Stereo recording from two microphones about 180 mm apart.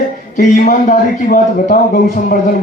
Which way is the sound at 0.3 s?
45° left (ahead or behind).